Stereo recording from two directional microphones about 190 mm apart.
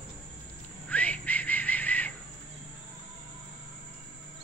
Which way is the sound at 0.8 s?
5° left (ahead or behind).